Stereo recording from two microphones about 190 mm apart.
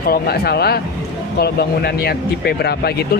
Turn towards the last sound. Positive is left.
turn(degrees=60)  # may be behind; listen again after turning